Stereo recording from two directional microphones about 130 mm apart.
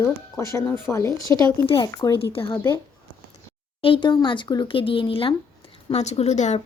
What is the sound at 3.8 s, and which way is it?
Speech, 40° left (ahead or behind).